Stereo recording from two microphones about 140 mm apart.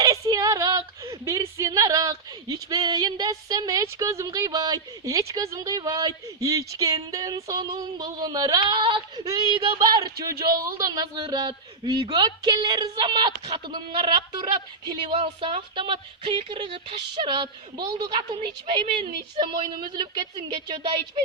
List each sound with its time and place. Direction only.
0.0 s a woman's voice: 25° right (ahead or behind)